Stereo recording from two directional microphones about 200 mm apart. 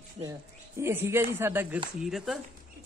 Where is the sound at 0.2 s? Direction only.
15° right (ahead or behind).